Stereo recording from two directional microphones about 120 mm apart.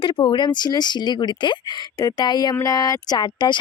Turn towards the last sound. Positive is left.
turn(degrees=35)  # may be behind; listen again after turning